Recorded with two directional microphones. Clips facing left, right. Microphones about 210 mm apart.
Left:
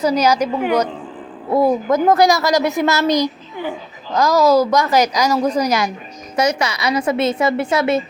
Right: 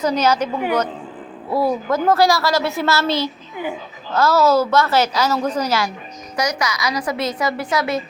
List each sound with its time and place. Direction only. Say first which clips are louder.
0.0 s a woman's voice: left 2 dB; 10° left (ahead or behind); by 8.0 s 25° left (ahead or behind)